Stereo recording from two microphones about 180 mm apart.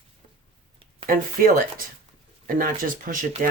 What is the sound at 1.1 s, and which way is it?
Speech, 50° right (ahead or behind).